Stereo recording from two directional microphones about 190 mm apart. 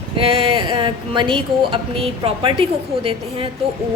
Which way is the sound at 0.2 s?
30° right (ahead or behind).